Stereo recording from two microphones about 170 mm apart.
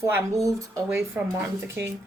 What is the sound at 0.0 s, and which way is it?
Speech, 15° right (ahead or behind).